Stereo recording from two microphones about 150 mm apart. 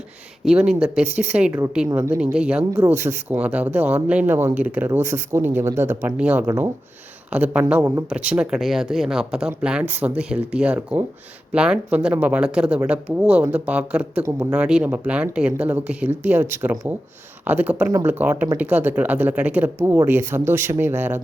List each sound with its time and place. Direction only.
0.4 s speech: 5° right (ahead or behind)
2.6 s speech: 20° right (ahead or behind)
8.1 s speech: 5° right (ahead or behind)